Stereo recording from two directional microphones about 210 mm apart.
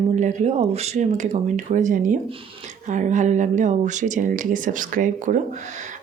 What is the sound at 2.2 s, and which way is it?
Speech, 25° right (ahead or behind).